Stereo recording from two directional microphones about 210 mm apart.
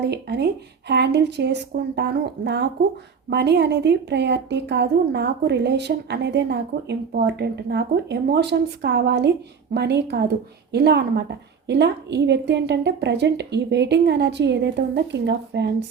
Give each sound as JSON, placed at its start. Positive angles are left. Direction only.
{"t": 0.0, "sound": "a woman's voice", "side_deg": -50}